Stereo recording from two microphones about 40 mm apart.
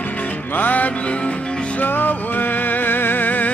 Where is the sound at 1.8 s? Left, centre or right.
Left.